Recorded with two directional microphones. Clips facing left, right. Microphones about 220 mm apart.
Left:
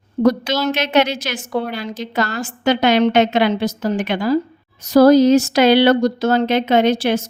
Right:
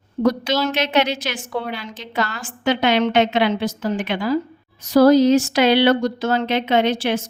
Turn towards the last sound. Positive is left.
turn(degrees=40)  # may be behind; listen again after turning